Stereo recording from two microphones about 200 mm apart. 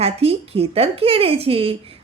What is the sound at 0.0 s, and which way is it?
A woman's voice, 30° right (ahead or behind).